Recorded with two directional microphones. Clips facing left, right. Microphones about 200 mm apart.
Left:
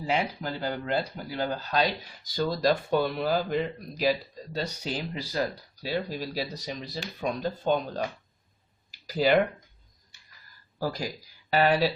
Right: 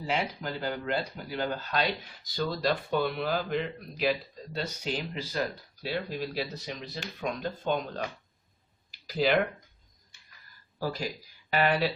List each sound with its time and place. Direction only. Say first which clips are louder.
0.4 s speech: left 1 dB; 35° left (ahead or behind)
8.9 s a sound: left 2 dB; 40° left (ahead or behind)
10.8 s speech: left 2 dB; 40° left (ahead or behind)